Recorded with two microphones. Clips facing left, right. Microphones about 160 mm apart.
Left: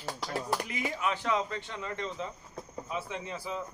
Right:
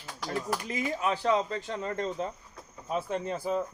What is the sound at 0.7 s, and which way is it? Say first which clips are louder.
Speech: right 3 dB; 35° right (ahead or behind).